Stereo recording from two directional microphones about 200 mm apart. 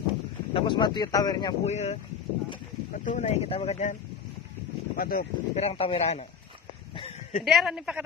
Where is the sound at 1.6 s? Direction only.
35° left (ahead or behind).